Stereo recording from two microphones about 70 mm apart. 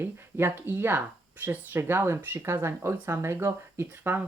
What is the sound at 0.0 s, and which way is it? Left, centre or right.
Speech, right.